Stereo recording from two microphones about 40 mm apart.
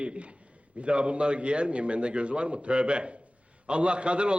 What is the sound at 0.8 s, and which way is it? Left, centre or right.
A man's voice, right.